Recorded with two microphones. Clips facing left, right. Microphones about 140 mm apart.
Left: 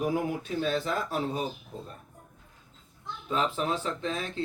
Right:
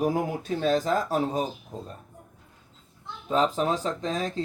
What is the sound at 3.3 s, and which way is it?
Speech, 40° right (ahead or behind).